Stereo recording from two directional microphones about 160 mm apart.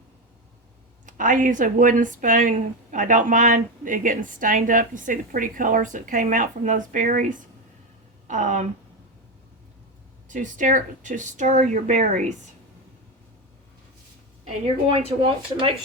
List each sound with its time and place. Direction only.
1.0 s speech: 55° right (ahead or behind)
10.2 s speech: 55° right (ahead or behind)
14.6 s speech: 35° right (ahead or behind)